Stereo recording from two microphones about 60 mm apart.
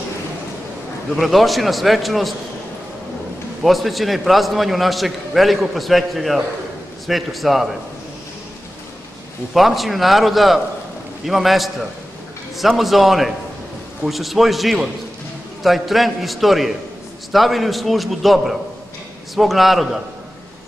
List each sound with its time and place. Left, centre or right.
1.1 s a man's voice: centre
3.6 s a man's voice: centre
9.5 s a man's voice: centre